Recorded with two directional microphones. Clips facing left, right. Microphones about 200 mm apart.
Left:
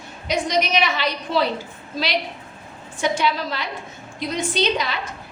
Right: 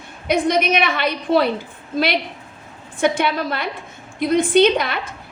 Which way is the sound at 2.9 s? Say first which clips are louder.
Right 3 dB; 55° right (ahead or behind).